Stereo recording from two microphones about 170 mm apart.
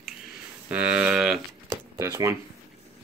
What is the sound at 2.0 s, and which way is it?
Speech, 15° right (ahead or behind).